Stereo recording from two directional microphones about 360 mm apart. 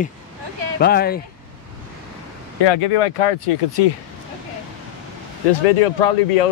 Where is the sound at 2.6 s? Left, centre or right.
Left.